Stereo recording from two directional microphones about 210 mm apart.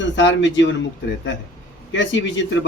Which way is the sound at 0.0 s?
60° left (ahead or behind).